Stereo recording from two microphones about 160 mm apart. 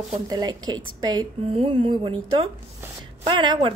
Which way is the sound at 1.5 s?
40° right (ahead or behind).